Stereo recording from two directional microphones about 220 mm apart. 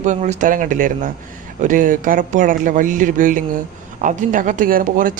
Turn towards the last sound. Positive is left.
turn(degrees=-40)  # may be behind; listen again after turning